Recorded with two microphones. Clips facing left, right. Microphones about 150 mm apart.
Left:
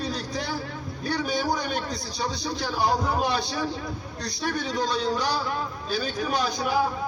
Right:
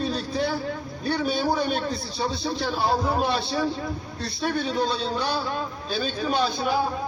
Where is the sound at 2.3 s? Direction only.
15° left (ahead or behind).